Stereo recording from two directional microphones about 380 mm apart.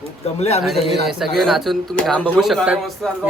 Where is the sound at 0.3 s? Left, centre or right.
Centre.